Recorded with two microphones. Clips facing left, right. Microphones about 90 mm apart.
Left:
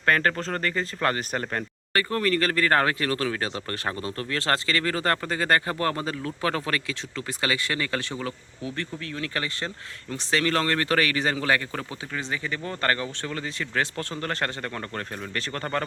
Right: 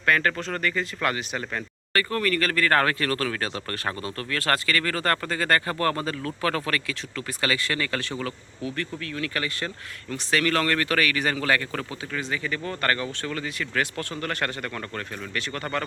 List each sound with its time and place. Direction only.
0.0 s speech: 35° left (ahead or behind)
1.9 s speech: 25° left (ahead or behind)